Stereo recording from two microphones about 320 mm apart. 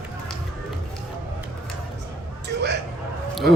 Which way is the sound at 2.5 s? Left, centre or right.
Right.